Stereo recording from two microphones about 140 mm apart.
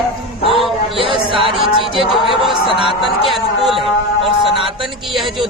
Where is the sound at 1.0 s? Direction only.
40° right (ahead or behind).